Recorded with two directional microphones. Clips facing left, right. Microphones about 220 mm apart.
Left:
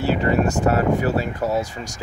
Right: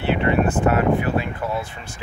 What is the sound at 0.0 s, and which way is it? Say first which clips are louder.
Speech: even; 40° left (ahead or behind).